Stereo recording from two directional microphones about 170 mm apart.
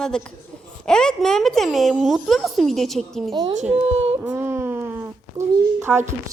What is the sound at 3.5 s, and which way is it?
Speech, 40° right (ahead or behind).